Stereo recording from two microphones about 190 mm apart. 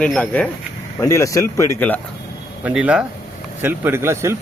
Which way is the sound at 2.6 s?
5° right (ahead or behind).